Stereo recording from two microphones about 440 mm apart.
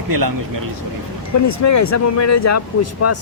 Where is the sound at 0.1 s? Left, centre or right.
Right.